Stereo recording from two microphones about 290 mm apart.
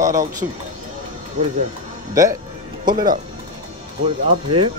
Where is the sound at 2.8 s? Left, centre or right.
Centre.